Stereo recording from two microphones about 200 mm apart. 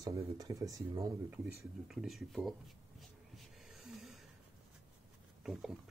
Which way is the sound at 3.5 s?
Centre (ahead or behind).